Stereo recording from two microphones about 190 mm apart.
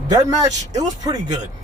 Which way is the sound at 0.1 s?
20° right (ahead or behind).